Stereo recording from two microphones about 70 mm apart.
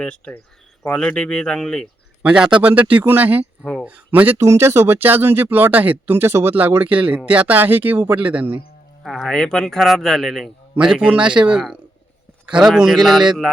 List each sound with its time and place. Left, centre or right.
0.0 s speech: centre
2.2 s speech: centre
4.4 s speech: right; by 8.6 s centre
9.0 s a man's voice: centre
10.8 s speech: centre
12.5 s a man's voice: centre